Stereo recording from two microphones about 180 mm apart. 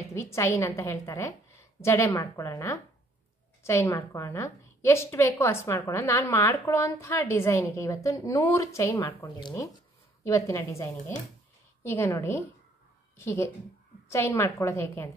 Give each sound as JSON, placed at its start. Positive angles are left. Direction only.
{"t": 0.1, "sound": "a woman's voice", "side_deg": 15}